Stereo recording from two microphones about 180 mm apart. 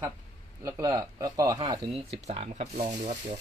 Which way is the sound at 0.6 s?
15° right (ahead or behind).